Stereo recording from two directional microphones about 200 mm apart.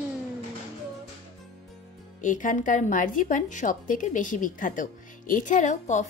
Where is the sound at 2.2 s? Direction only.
40° left (ahead or behind).